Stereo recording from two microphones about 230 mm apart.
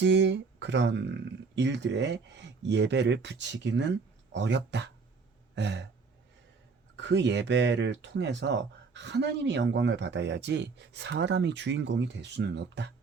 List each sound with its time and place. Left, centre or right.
0.0 s speech: right
6.9 s speech: right